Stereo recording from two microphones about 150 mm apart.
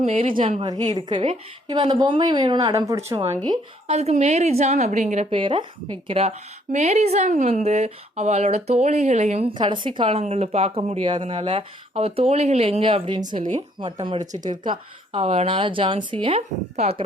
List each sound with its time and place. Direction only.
0.0 s a woman's voice: 40° right (ahead or behind)
3.8 s a woman's voice: 45° right (ahead or behind)
9.6 s a woman's voice: 30° right (ahead or behind)